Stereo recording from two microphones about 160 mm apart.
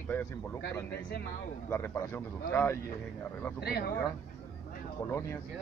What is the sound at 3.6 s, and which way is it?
Speech, 80° left.